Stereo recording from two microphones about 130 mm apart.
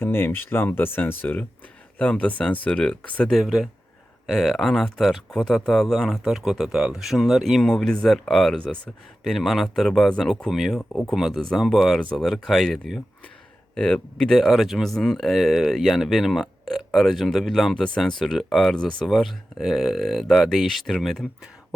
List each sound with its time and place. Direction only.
0.0 s speech: 15° left (ahead or behind); by 21.8 s 5° right (ahead or behind)